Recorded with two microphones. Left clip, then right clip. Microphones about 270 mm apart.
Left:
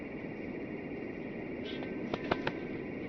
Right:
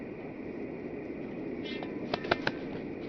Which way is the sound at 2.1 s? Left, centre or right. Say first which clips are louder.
Right 4 dB; centre.